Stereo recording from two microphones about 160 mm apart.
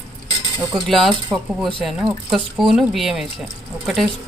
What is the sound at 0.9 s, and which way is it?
Speech, centre (ahead or behind).